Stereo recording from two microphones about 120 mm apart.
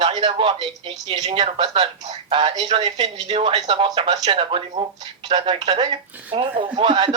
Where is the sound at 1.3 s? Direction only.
50° right (ahead or behind).